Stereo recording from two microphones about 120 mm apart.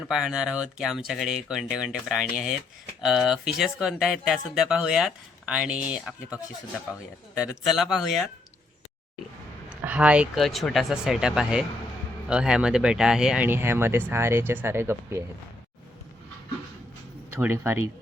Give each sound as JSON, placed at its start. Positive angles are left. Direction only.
{"t": 0.1, "sound": "speech", "side_deg": -5}
{"t": 7.6, "sound": "speech", "side_deg": 0}
{"t": 9.6, "sound": "a sound", "side_deg": -10}
{"t": 10.3, "sound": "speech", "side_deg": 0}
{"t": 17.3, "sound": "speech", "side_deg": -20}